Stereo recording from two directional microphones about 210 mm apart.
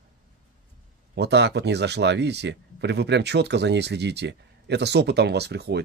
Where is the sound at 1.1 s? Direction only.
55° right (ahead or behind).